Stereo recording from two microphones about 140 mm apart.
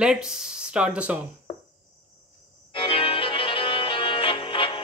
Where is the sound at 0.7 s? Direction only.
10° right (ahead or behind).